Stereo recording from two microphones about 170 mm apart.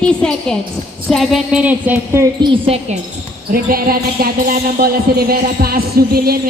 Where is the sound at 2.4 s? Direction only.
30° right (ahead or behind).